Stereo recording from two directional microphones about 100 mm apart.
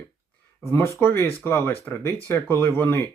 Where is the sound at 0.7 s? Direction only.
25° left (ahead or behind).